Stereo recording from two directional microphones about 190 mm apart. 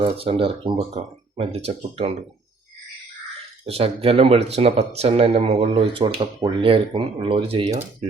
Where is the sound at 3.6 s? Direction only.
30° right (ahead or behind).